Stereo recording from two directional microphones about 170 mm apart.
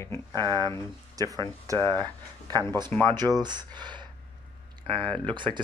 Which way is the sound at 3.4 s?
25° right (ahead or behind).